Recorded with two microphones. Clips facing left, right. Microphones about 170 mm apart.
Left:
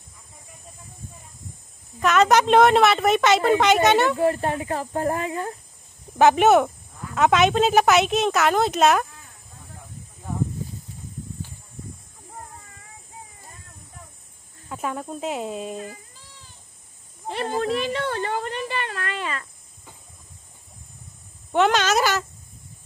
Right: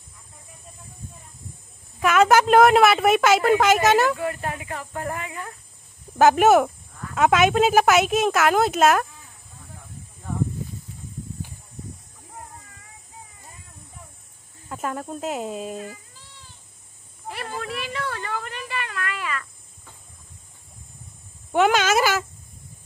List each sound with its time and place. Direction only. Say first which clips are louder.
2.0 s a woman's voice: right 1 dB; 5° right (ahead or behind)
4.2 s speech: left 6 dB; 35° left (ahead or behind)
6.1 s a woman's voice: even; 5° right (ahead or behind)
14.7 s a woman's voice: even; centre (ahead or behind)
17.3 s a child's voice: left 7 dB; 30° left (ahead or behind)
21.5 s speech: right 1 dB; 10° right (ahead or behind)